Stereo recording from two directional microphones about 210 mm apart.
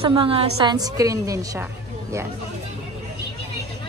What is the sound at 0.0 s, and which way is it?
A woman's voice, 25° right (ahead or behind).